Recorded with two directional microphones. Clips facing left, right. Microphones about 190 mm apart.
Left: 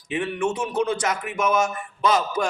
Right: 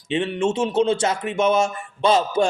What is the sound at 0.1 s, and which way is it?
Speech, 25° right (ahead or behind).